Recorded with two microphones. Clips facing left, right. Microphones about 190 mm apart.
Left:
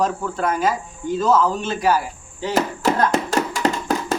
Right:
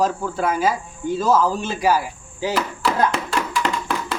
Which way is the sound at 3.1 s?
45° left (ahead or behind).